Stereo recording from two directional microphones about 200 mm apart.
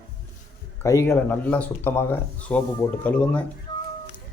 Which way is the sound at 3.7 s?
25° left (ahead or behind).